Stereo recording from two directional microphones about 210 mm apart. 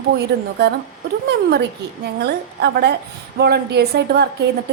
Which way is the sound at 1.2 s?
50° right (ahead or behind).